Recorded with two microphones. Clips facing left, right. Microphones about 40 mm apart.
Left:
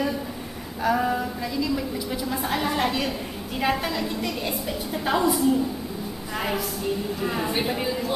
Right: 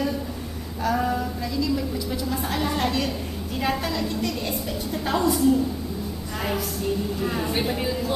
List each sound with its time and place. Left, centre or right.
0.8 s a woman's voice: centre